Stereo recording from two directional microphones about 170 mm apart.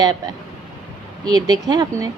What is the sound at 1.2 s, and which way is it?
Speech, 25° right (ahead or behind).